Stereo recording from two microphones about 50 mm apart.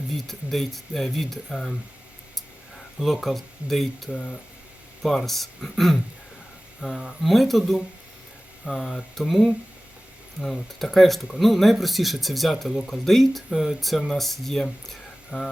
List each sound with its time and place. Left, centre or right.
0.1 s speech: centre
2.3 s a sound: centre
5.0 s speech: centre
6.8 s speech: centre
7.2 s speech: centre
8.6 s speech: centre
15.3 s speech: centre